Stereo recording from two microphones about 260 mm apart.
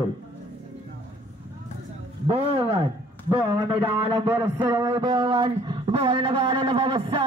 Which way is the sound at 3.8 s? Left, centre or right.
Centre.